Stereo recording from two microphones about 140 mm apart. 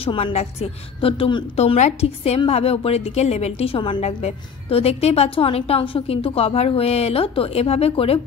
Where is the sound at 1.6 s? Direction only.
50° left (ahead or behind).